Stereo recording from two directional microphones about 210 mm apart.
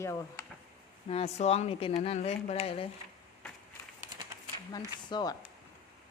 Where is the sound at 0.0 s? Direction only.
15° left (ahead or behind).